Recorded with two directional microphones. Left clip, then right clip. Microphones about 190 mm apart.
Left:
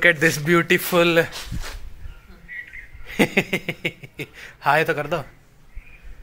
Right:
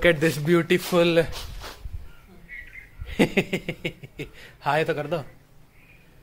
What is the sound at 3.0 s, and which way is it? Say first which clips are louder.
Speech: left 3 dB; 15° left (ahead or behind).